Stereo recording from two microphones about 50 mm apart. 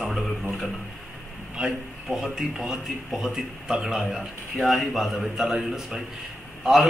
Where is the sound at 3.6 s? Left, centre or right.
Centre.